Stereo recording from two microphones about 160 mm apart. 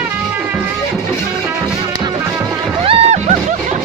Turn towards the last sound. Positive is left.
turn(degrees=-40)  # may be behind; listen again after turning